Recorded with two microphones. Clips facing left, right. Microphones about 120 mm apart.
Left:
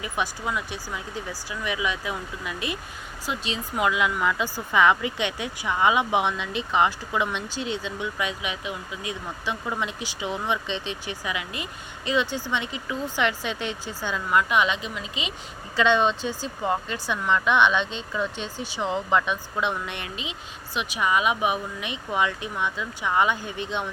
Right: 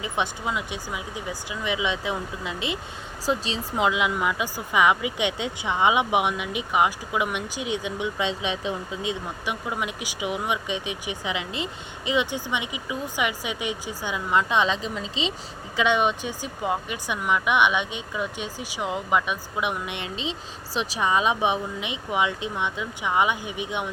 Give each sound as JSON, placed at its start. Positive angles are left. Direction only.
{"t": 0.0, "sound": "speech", "side_deg": -20}
{"t": 3.2, "sound": "speech", "side_deg": -35}
{"t": 15.7, "sound": "speech", "side_deg": -15}
{"t": 20.7, "sound": "speech", "side_deg": -30}